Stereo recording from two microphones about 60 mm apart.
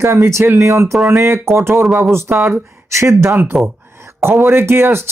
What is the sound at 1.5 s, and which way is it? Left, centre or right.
Speech, right.